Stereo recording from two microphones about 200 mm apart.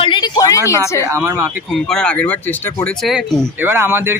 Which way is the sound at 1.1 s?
15° right (ahead or behind).